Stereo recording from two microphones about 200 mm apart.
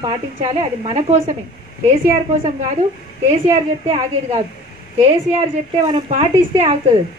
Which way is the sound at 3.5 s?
20° right (ahead or behind).